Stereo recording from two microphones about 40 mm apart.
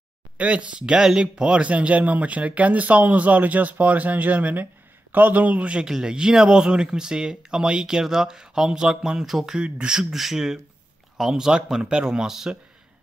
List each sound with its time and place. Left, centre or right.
0.4 s speech: right
1.7 s a man's voice: right
5.6 s speech: right
5.9 s speech: centre
9.6 s speech: right
10.1 s speech: centre